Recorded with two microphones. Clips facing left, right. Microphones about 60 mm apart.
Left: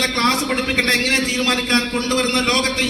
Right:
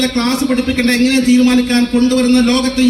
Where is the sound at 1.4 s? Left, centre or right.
Left.